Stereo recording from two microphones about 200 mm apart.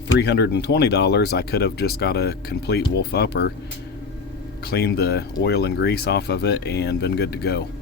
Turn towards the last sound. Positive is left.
turn(degrees=55)  # may be behind; listen again after turning